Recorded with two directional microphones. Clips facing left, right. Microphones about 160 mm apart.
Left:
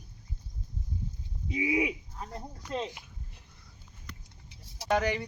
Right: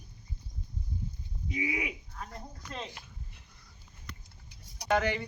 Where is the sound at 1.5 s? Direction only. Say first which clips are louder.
Left 6 dB; 25° left (ahead or behind).